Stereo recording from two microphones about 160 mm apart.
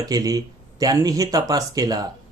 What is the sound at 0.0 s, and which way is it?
Speech, 20° right (ahead or behind).